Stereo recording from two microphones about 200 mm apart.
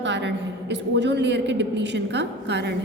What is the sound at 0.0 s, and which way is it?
A woman's voice, 60° right (ahead or behind).